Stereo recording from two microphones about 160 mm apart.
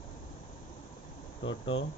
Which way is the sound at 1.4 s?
35° left (ahead or behind).